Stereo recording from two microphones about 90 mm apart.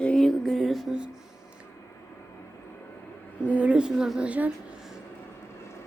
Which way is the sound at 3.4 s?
15° right (ahead or behind).